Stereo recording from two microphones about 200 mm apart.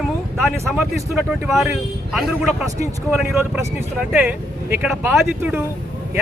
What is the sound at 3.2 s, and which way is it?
Speech, 10° right (ahead or behind).